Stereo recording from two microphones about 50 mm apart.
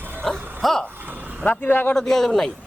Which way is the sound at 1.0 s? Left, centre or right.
Right.